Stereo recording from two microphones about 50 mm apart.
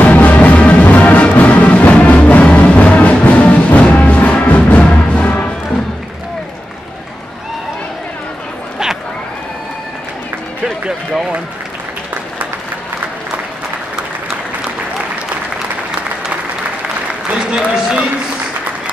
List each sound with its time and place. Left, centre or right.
0.0 s music: left
17.1 s applause: right